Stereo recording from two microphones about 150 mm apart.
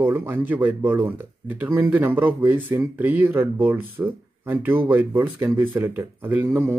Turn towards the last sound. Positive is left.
turn(degrees=-15)  # may be behind; listen again after turning